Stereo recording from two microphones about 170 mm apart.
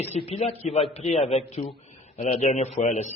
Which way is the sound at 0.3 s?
40° left (ahead or behind).